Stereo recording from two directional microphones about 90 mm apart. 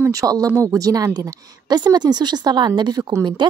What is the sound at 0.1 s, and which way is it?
A woman's voice, 40° right (ahead or behind).